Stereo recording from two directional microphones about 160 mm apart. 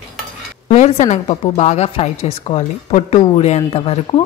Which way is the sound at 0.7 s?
45° left (ahead or behind).